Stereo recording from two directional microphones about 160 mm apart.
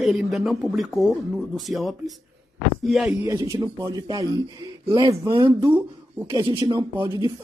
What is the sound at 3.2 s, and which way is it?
Speech, 20° right (ahead or behind).